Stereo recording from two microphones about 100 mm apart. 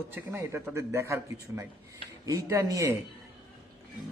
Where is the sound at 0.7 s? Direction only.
25° right (ahead or behind).